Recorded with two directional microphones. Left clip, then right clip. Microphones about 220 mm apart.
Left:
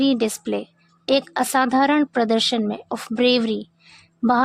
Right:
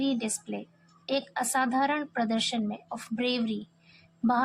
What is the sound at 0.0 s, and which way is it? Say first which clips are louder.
Speech: left 10 dB; 45° left (ahead or behind).